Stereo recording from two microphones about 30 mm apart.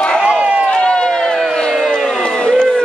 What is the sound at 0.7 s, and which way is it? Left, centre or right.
Crowd, left.